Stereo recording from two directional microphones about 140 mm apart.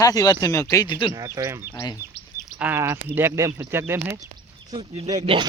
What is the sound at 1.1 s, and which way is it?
Speech, 25° right (ahead or behind).